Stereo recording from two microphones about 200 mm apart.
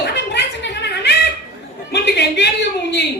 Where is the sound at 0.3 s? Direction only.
60° left (ahead or behind).